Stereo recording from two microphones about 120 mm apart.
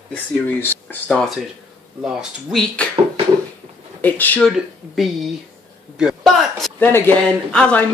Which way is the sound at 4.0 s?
15° left (ahead or behind).